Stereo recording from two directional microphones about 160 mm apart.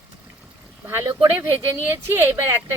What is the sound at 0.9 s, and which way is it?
Speech, 15° right (ahead or behind).